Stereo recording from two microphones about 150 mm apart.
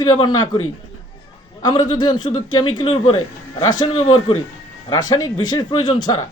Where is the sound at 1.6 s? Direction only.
30° left (ahead or behind).